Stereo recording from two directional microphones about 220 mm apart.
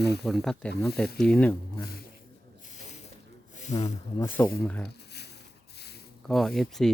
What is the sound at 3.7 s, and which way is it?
Speech, 30° left (ahead or behind).